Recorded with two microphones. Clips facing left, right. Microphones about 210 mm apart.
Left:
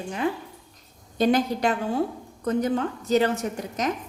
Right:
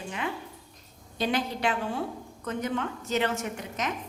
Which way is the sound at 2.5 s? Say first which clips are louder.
Left 7 dB; 35° left (ahead or behind).